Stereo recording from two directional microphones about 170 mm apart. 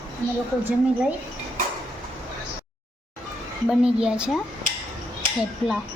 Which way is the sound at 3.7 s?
5° right (ahead or behind).